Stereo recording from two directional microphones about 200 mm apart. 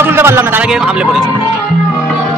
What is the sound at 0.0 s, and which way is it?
Speech, 10° right (ahead or behind).